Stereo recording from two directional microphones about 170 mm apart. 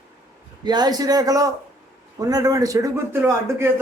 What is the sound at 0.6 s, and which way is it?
A man's voice, 25° right (ahead or behind).